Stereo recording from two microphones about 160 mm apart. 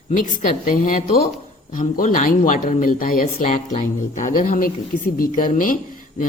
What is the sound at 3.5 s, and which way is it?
Speech, 45° left (ahead or behind).